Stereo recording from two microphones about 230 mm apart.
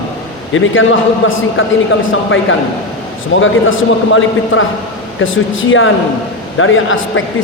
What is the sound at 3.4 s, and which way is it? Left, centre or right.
Speech, left.